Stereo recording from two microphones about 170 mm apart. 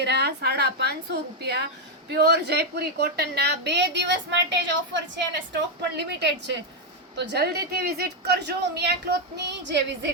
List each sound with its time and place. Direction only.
0.0 s a woman's voice: 80° right
5.5 s a woman's voice: 75° right (ahead or behind)